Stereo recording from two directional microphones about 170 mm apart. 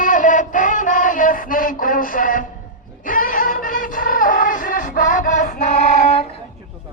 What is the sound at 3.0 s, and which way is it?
Music, 55° left (ahead or behind).